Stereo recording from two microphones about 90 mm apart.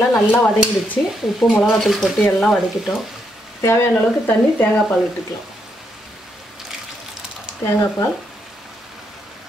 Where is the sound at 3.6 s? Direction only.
30° left (ahead or behind).